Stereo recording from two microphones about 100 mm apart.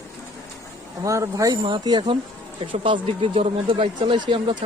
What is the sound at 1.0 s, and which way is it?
Speech, 30° right (ahead or behind).